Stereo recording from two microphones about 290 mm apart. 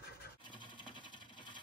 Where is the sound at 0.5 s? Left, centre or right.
Centre.